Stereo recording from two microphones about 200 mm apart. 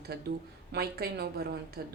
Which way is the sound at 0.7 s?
50° right (ahead or behind).